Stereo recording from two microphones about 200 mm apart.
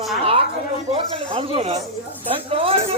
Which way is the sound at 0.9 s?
25° right (ahead or behind).